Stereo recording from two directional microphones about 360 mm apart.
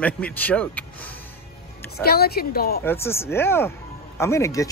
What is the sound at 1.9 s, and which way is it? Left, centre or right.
Speech, left.